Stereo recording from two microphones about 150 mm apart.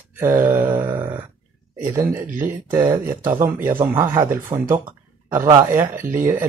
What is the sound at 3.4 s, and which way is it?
Speech, 15° right (ahead or behind).